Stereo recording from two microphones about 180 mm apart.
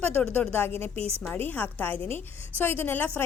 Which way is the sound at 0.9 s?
35° right (ahead or behind).